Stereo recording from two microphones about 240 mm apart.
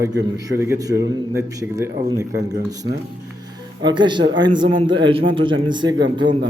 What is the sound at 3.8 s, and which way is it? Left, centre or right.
A man's voice, centre.